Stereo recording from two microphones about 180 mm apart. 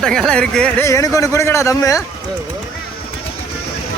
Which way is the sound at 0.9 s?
15° left (ahead or behind).